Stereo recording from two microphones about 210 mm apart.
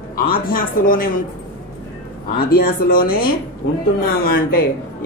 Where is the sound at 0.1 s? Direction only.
45° left (ahead or behind).